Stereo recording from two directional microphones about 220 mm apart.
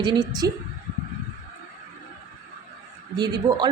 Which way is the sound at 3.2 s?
20° right (ahead or behind).